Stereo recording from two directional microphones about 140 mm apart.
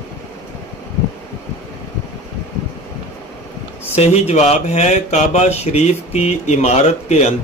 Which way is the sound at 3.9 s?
50° left (ahead or behind).